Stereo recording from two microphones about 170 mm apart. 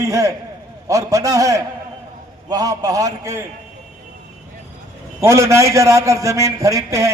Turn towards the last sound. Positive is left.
turn(degrees=-20)  # may be behind; listen again after turning